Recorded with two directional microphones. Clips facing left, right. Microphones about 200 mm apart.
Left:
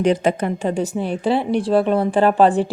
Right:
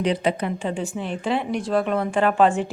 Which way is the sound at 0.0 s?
45° left (ahead or behind).